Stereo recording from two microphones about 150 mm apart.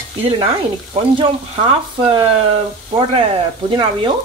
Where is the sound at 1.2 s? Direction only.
40° right (ahead or behind).